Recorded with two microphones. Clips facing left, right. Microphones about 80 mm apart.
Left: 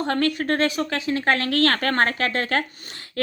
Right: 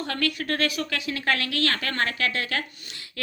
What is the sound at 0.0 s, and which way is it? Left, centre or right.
A woman's voice, left.